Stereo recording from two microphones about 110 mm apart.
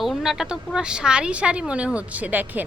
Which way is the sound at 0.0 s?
5° right (ahead or behind).